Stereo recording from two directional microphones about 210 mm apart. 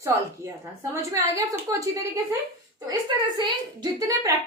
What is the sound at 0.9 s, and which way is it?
A woman's voice, 15° right (ahead or behind).